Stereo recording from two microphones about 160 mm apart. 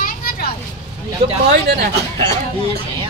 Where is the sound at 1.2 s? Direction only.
40° right (ahead or behind).